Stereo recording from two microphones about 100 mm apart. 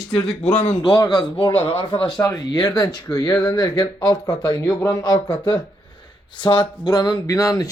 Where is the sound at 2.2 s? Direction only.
30° left (ahead or behind).